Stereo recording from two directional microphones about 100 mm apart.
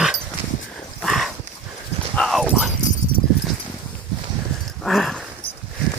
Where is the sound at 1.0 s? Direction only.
Centre (ahead or behind).